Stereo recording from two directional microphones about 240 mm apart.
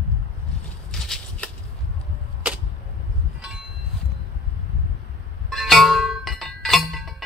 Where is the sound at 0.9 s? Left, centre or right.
Centre.